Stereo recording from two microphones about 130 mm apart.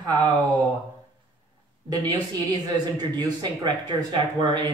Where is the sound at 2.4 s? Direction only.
35° right (ahead or behind).